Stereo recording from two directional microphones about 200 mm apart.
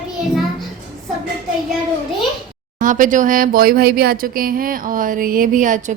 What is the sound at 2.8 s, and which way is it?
A woman's voice, 40° right (ahead or behind).